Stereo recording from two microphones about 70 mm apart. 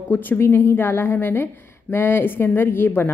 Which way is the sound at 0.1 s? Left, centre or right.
Left.